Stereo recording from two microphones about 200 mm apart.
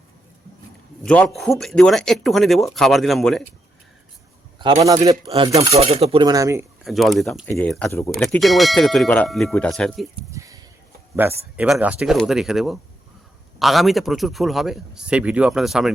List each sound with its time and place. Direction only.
1.0 s a man's voice: 5° left (ahead or behind)
4.8 s a man's voice: 15° right (ahead or behind)
5.5 s speech: 30° right (ahead or behind); by 6.7 s 15° right (ahead or behind)
6.8 s a man's voice: centre (ahead or behind)
10.3 s a sound: 15° right (ahead or behind)
11.1 s a man's voice: 10° right (ahead or behind)